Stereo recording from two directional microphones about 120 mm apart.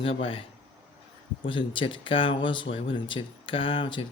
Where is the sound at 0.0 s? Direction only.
50° left (ahead or behind).